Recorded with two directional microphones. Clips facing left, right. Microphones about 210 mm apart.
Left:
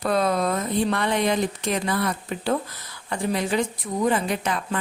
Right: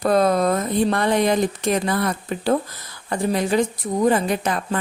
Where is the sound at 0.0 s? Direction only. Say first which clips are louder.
Right 5 dB; 45° right (ahead or behind).